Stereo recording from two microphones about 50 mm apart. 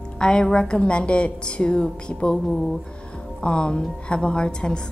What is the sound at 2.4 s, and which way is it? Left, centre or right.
Speech, centre.